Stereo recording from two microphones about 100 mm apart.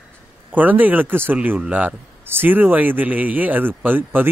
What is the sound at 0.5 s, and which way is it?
Speech, 15° right (ahead or behind).